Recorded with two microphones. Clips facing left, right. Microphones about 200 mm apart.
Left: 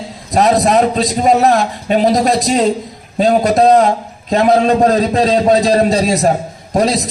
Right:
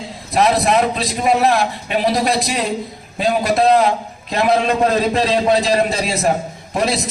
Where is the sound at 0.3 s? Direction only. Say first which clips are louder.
Left 4 dB; 40° left (ahead or behind).